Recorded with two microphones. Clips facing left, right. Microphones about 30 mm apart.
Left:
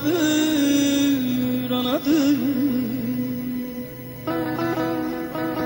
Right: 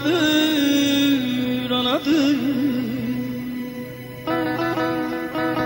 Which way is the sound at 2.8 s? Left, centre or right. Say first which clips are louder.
Even; right.